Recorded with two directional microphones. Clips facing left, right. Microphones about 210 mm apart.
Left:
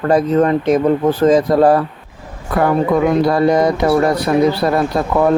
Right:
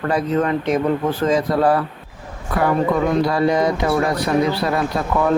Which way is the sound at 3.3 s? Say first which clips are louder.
Left 4 dB; 45° left (ahead or behind).